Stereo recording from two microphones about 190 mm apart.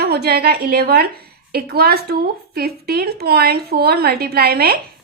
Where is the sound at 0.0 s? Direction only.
55° right (ahead or behind).